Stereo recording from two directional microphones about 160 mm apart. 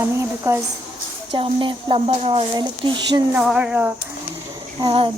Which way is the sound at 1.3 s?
30° right (ahead or behind).